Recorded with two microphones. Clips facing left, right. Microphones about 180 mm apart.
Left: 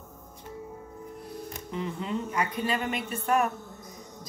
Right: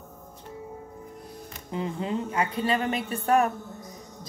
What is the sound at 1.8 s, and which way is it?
Speech, 30° right (ahead or behind).